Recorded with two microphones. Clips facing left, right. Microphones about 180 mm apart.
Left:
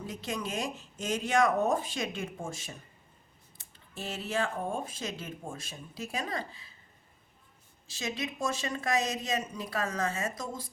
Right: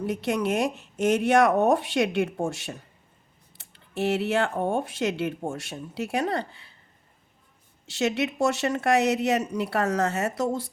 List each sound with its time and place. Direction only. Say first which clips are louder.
0.0 s speech: right 10 dB; 70° right (ahead or behind)
7.9 s speech: right 10 dB; 70° right (ahead or behind)